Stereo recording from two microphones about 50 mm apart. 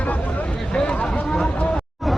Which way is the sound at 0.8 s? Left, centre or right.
Centre.